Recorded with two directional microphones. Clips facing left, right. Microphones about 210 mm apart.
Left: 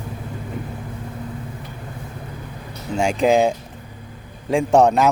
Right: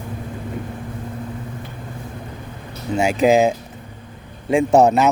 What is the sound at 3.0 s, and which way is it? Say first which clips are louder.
Speech: right 2 dB; 5° right (ahead or behind).